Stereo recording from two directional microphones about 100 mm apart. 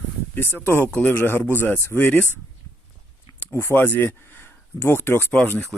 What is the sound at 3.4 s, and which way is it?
A man's voice, 20° left (ahead or behind).